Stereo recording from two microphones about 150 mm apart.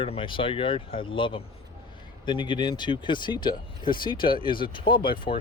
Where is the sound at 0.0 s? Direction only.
35° left (ahead or behind).